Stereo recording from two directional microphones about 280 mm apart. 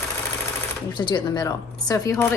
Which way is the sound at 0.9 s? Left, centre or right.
Centre.